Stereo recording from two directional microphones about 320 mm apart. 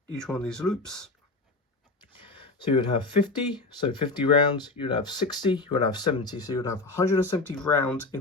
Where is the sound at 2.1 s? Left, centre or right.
Centre.